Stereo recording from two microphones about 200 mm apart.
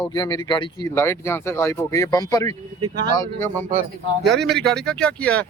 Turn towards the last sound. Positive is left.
turn(degrees=5)  # may be behind; listen again after turning